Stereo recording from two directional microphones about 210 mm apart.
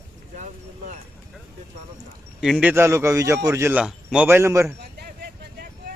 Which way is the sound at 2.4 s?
5° right (ahead or behind).